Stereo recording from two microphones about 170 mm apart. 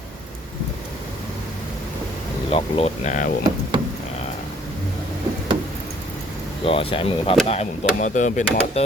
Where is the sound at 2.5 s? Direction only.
35° left (ahead or behind).